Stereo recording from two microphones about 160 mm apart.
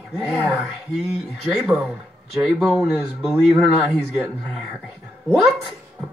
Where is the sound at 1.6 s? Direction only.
Centre (ahead or behind).